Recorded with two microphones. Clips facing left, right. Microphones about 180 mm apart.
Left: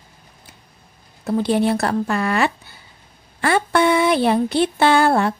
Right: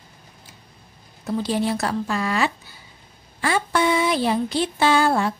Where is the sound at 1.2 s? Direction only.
60° left (ahead or behind).